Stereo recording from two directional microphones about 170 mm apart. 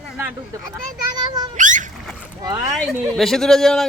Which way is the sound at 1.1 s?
25° right (ahead or behind).